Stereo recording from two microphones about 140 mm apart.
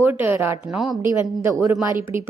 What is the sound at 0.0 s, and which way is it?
Speech, 15° right (ahead or behind).